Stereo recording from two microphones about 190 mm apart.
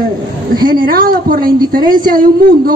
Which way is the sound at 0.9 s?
50° right (ahead or behind).